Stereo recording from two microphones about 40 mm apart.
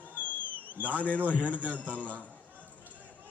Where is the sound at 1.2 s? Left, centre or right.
Right.